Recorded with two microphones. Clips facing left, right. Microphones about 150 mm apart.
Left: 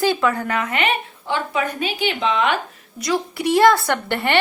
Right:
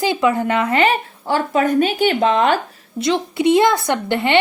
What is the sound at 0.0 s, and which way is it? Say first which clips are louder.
A woman's voice: right 2 dB; 15° right (ahead or behind).